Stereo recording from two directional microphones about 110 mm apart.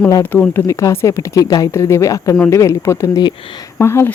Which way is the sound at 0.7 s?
30° left (ahead or behind).